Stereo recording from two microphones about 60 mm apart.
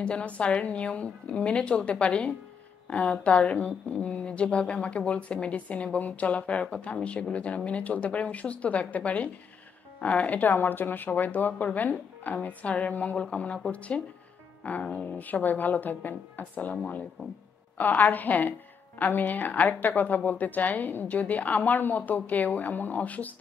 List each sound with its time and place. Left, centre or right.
0.0 s speech: centre
17.7 s speech: left